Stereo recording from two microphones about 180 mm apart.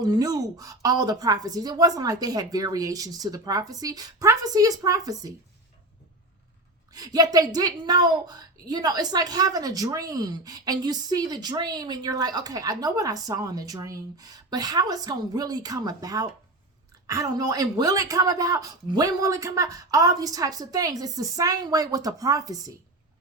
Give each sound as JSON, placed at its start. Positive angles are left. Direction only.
{"t": 0.0, "sound": "a woman's voice", "side_deg": -20}
{"t": 6.9, "sound": "a woman's voice", "side_deg": -20}